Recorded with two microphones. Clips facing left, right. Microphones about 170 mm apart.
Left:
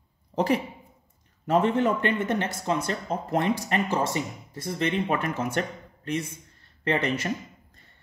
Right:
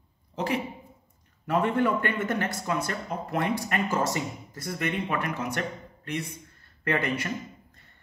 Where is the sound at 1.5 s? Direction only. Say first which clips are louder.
Left 2 dB; 25° left (ahead or behind).